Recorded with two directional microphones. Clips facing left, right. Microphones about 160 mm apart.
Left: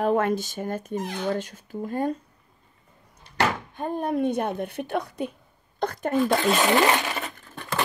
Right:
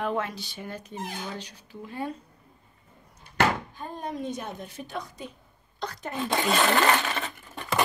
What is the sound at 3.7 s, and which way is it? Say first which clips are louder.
Speech: left 8 dB; 60° left (ahead or behind).